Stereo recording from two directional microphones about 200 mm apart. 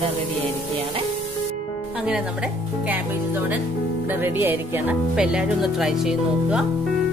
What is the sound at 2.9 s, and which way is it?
Speech, 10° right (ahead or behind).